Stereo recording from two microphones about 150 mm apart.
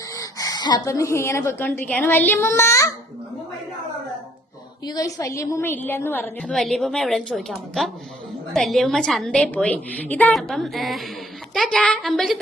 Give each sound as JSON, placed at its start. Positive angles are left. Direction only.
{"t": 0.2, "sound": "speech", "side_deg": 25}
{"t": 4.9, "sound": "a woman's voice", "side_deg": 25}
{"t": 6.4, "sound": "a woman's voice", "side_deg": 5}